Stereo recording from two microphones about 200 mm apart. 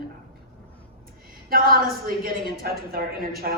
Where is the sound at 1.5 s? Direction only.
45° right (ahead or behind).